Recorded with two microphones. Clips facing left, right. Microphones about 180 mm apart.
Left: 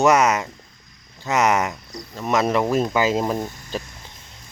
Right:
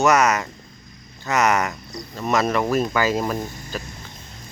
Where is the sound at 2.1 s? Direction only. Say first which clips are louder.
Left 1 dB; 15° left (ahead or behind).